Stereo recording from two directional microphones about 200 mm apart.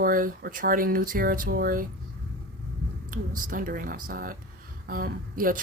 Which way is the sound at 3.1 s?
45° right (ahead or behind).